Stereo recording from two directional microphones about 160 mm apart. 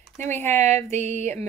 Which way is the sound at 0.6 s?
45° right (ahead or behind).